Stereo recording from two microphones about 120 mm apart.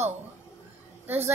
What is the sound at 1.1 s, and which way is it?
Speech, 20° right (ahead or behind).